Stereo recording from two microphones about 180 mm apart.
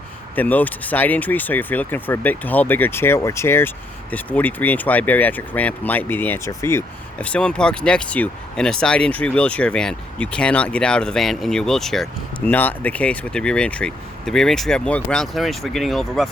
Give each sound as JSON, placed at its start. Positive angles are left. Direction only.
{"t": 0.3, "sound": "speech", "side_deg": 10}